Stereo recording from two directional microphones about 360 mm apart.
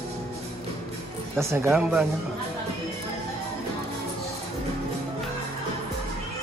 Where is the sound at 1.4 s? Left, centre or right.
Centre.